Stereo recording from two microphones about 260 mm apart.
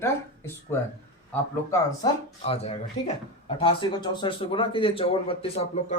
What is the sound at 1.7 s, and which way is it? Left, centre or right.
Speech, centre.